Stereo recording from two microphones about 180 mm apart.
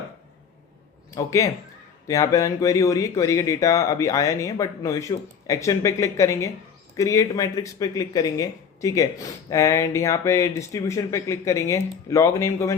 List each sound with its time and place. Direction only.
1.1 s speech: 15° left (ahead or behind)